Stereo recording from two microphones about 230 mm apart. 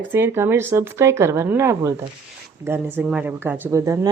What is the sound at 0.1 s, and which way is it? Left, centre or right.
A woman's voice, centre.